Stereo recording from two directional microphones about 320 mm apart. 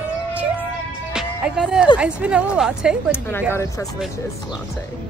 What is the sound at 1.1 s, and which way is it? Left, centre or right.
Speech, centre.